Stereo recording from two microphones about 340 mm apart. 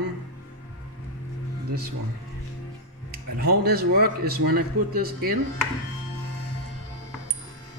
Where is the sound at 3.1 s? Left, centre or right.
Right.